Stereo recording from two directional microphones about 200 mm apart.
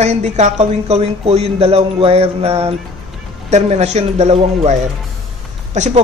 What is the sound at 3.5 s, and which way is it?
A man's voice, 35° right (ahead or behind).